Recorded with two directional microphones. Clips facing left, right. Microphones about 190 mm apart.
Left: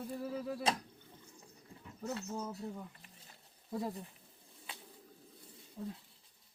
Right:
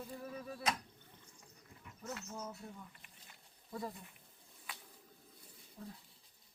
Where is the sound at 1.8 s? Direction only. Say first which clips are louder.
Left 6 dB; 30° left (ahead or behind).